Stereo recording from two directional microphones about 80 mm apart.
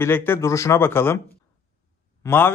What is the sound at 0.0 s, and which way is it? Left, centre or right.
A man's voice, left.